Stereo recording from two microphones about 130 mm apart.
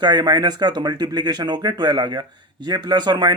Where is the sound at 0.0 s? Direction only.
35° right (ahead or behind).